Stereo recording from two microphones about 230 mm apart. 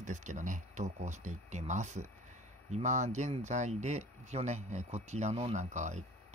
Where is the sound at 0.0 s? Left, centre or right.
Right.